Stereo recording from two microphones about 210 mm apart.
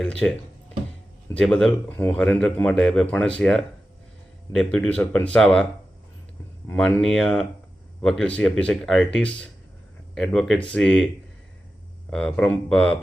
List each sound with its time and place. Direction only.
0.0 s a man's voice: 5° left (ahead or behind)
6.7 s a man's voice: 5° left (ahead or behind)
12.1 s a man's voice: 5° left (ahead or behind)